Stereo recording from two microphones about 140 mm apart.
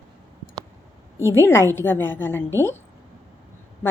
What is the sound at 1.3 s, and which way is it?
A woman's voice, 15° left (ahead or behind).